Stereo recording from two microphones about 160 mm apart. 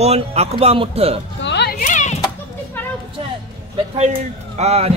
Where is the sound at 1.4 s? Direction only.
90° left.